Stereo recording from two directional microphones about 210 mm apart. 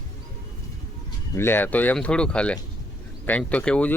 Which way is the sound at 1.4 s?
10° left (ahead or behind).